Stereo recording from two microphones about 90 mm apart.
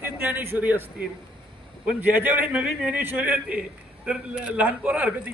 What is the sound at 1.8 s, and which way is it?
Speech, 20° right (ahead or behind).